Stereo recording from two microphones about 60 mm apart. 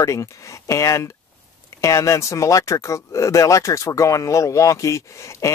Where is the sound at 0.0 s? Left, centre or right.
Left.